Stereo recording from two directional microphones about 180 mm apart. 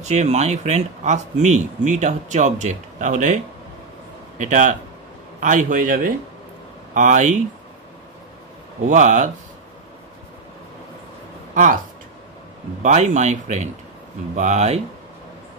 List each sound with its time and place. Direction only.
0.0 s speech: 40° right (ahead or behind)
4.4 s a man's voice: 45° right (ahead or behind)
8.8 s a man's voice: 45° right (ahead or behind)
11.5 s speech: 45° right (ahead or behind)
12.8 s speech: 40° right (ahead or behind)